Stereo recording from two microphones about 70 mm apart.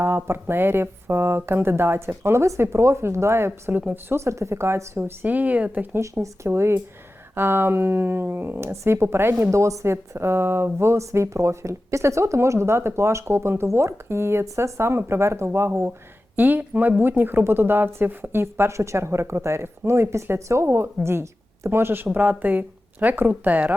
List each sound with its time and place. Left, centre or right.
0.0 s speech: right
5.3 s speech: right
5.9 s speech: right
9.4 s speech: right
16.3 s speech: right